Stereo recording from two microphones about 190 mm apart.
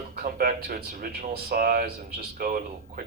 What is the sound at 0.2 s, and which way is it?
Speech, 50° right (ahead or behind).